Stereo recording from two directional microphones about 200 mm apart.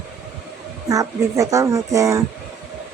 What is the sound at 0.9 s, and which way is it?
Speech, 15° right (ahead or behind).